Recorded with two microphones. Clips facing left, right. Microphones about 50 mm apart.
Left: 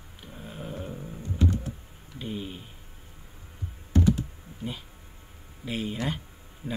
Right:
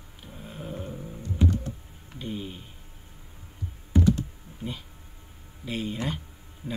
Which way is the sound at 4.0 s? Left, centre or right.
Centre.